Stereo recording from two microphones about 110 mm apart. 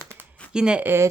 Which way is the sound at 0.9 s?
25° right (ahead or behind).